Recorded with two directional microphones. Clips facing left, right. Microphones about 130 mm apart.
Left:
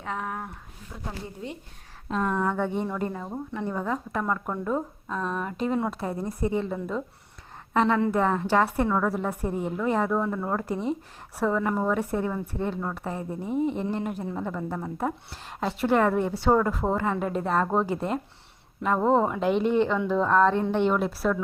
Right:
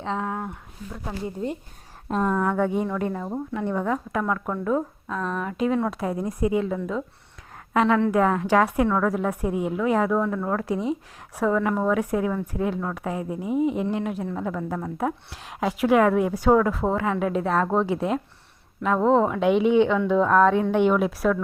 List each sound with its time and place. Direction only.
0.0 s speech: 25° right (ahead or behind)
1.4 s a woman's voice: 40° right (ahead or behind)
2.2 s speech: 5° right (ahead or behind)
2.8 s a woman's voice: 5° left (ahead or behind)